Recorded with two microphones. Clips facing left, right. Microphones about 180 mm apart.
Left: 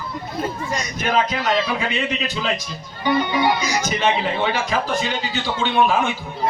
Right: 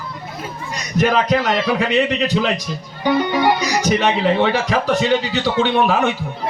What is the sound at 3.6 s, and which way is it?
A man's voice, 70° right (ahead or behind).